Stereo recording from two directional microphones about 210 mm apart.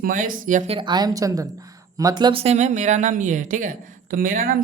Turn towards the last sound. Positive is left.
turn(degrees=-40)  # may be behind; listen again after turning